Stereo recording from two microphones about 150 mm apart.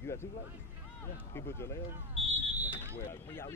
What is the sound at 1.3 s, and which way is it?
Speech, 15° left (ahead or behind).